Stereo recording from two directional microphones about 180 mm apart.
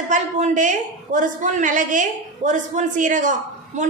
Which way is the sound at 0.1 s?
45° right (ahead or behind).